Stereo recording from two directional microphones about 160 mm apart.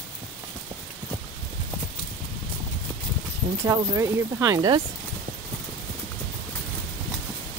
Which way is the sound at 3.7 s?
20° right (ahead or behind).